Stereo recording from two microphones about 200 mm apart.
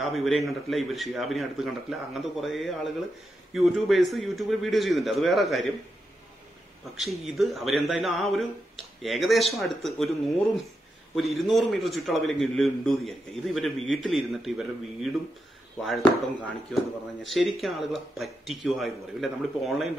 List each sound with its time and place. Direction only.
0.0 s a man's voice: centre (ahead or behind)
7.0 s a man's voice: centre (ahead or behind)